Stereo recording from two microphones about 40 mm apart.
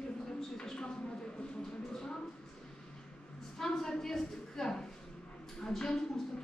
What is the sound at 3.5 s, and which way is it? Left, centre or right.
A woman's voice, centre.